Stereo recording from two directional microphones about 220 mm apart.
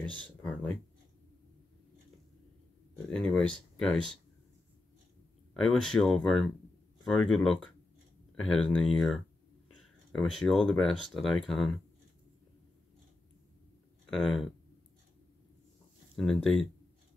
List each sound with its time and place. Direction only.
0.0 s speech: 20° right (ahead or behind)
0.4 s speech: 5° left (ahead or behind)
3.1 s speech: 5° left (ahead or behind)
5.5 s speech: centre (ahead or behind)
14.1 s speech: centre (ahead or behind)
16.2 s speech: centre (ahead or behind)